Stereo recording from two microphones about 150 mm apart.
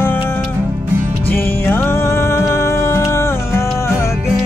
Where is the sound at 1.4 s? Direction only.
15° left (ahead or behind).